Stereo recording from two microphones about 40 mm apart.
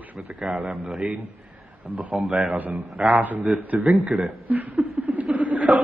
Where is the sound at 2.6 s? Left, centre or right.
Right.